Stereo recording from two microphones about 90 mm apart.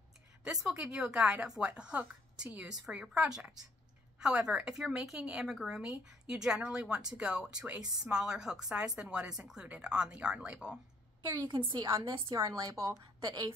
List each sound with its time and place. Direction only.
0.4 s a woman's voice: 5° right (ahead or behind)
11.3 s a woman's voice: 60° right (ahead or behind)
12.1 s a woman's voice: 40° right (ahead or behind)